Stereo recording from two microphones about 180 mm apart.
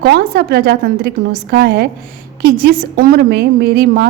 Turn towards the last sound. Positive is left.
turn(degrees=-60)  # may be behind; listen again after turning